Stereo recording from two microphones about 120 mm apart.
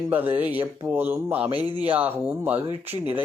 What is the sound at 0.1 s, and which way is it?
Speech, 15° right (ahead or behind).